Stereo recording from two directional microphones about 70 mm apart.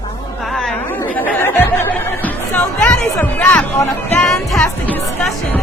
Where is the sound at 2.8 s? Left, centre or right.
Left.